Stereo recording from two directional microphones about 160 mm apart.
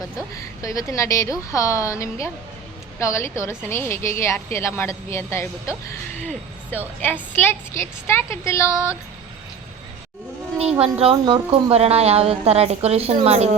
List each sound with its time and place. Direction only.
0.3 s a woman's voice: 20° left (ahead or behind)
10.8 s a woman's voice: 35° right (ahead or behind)